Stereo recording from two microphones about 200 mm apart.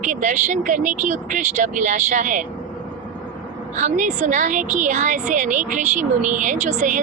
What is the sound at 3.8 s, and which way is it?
A woman's voice, 35° right (ahead or behind).